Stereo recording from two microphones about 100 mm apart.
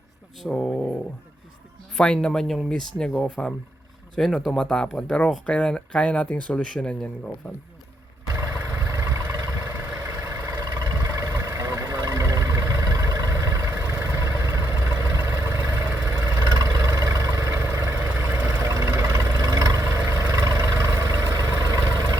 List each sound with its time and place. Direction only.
0.4 s speech: 10° left (ahead or behind)
2.0 s speech: 10° left (ahead or behind)
8.5 s vehicle: 20° right (ahead or behind)
10.6 s a sound: 45° right (ahead or behind)
11.0 s vehicle: 35° right (ahead or behind)
15.9 s vehicle: 15° right (ahead or behind)
16.5 s vehicle: 40° right (ahead or behind)
17.4 s vehicle: 25° right (ahead or behind)
19.4 s a sound: 40° right (ahead or behind)
19.8 s vehicle: 25° right (ahead or behind)